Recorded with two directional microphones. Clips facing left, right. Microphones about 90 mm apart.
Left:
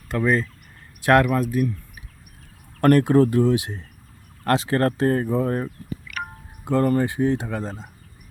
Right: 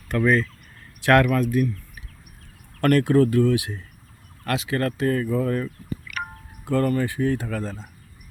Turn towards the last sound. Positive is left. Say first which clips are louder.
# even
turn(degrees=20)  # may be behind; listen again after turning